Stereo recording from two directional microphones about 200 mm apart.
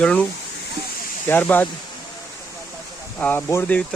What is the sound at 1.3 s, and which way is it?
Speech, 10° left (ahead or behind).